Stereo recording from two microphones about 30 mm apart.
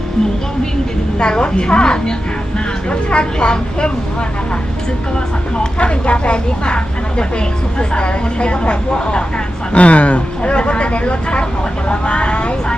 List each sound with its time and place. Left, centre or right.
1.2 s speech: left
5.5 s speech: left
9.7 s speech: left
10.5 s speech: left